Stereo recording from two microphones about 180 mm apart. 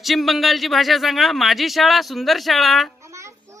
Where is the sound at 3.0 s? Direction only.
15° right (ahead or behind).